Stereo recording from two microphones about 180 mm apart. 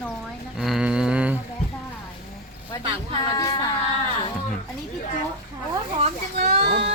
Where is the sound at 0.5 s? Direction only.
Centre (ahead or behind).